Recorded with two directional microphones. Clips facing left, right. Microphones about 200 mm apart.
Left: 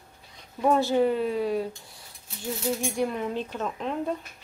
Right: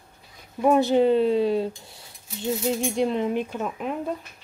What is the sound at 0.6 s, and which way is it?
Speech, 15° right (ahead or behind).